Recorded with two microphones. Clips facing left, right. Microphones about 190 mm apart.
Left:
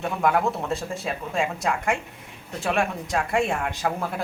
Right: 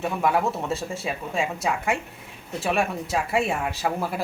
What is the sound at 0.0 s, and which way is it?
Speech, 5° right (ahead or behind).